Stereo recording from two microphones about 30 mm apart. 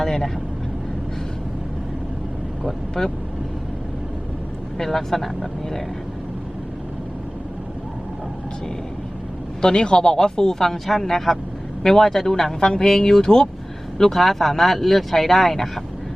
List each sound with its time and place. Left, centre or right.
0.0 s speech: centre
3.0 s speech: centre
4.8 s speech: centre
9.6 s speech: left
10.6 s speech: centre
12.5 s speech: left
12.9 s speech: centre
14.0 s speech: centre